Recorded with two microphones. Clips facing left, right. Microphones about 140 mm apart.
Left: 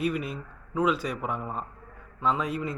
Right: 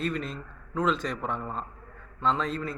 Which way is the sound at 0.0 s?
10° left (ahead or behind).